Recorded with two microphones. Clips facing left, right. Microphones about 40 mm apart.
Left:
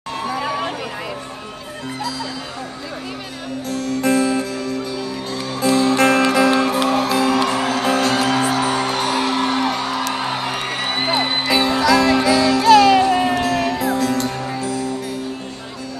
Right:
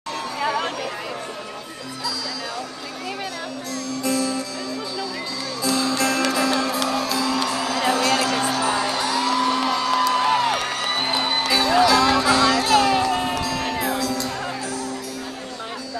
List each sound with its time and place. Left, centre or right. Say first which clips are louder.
0.4 s music: right 2 dB; centre
3.7 s music: left 6 dB; left
12.3 s music: left 2 dB; right
12.7 s music: left 6 dB; left